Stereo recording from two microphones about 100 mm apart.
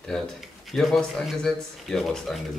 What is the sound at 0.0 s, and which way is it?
A man's voice, 5° left (ahead or behind).